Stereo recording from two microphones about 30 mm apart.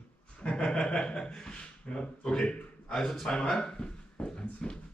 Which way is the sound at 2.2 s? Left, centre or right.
Left.